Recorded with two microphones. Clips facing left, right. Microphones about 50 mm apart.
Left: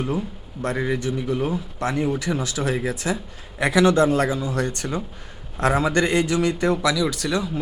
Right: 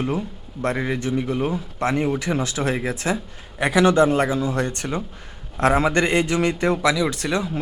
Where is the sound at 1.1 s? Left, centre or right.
Centre.